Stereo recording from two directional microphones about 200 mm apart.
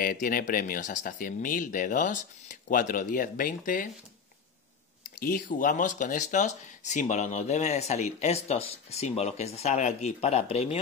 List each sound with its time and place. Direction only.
0.0 s speech: 45° left (ahead or behind)
5.0 s speech: 45° left (ahead or behind)